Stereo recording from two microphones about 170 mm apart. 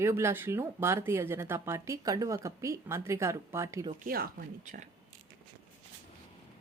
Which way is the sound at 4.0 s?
55° right (ahead or behind).